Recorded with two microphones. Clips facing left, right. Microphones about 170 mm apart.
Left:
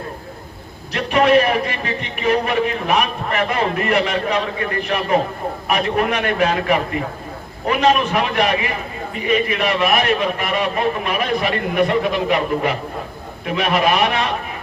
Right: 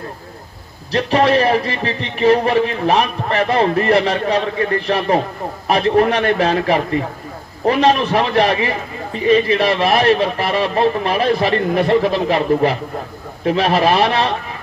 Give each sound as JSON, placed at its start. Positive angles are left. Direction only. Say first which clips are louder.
{"t": 0.9, "sound": "speech", "louder": "even", "side_deg": -35}